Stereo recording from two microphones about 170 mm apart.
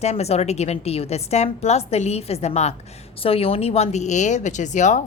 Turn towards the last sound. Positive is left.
turn(degrees=45)  # may be behind; listen again after turning